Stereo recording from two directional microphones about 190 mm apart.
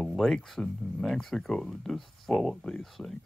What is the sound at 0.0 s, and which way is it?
Speech, centre (ahead or behind).